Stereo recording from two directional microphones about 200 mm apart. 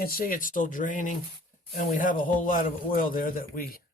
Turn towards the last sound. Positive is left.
turn(degrees=45)  # may be behind; listen again after turning